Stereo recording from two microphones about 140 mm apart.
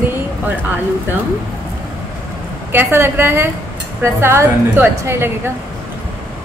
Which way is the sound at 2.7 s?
15° right (ahead or behind).